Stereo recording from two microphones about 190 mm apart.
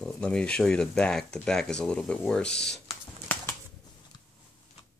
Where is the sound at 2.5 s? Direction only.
60° left (ahead or behind).